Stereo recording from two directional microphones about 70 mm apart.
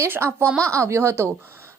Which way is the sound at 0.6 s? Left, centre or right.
Right.